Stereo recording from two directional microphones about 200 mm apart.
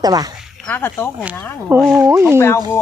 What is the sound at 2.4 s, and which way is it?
Speech, 10° left (ahead or behind).